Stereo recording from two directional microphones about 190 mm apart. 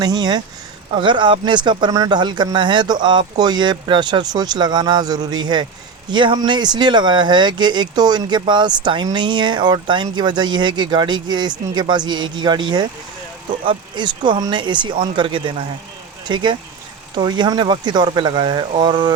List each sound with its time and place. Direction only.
0.0 s speech: 20° right (ahead or behind)